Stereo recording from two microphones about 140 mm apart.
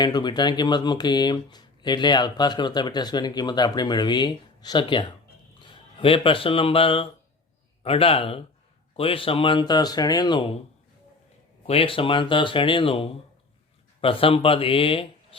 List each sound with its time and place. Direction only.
0.0 s speech: 30° left (ahead or behind)
11.6 s speech: 40° left (ahead or behind)